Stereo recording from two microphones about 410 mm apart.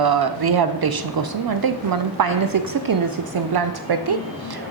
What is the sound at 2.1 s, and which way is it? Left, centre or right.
Speech, right.